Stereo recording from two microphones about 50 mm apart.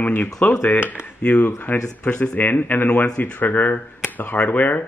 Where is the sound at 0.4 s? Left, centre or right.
Left.